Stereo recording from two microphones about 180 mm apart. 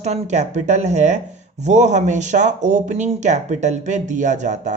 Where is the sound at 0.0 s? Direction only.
40° right (ahead or behind).